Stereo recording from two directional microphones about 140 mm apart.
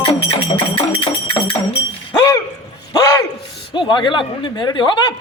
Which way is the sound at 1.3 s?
35° left (ahead or behind).